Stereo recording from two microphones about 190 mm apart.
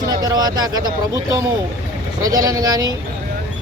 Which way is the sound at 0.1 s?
20° right (ahead or behind).